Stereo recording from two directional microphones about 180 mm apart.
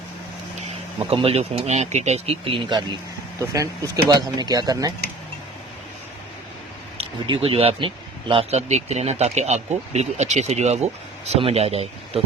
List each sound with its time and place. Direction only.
0.9 s speech: 35° right (ahead or behind)
6.9 s speech: 30° right (ahead or behind)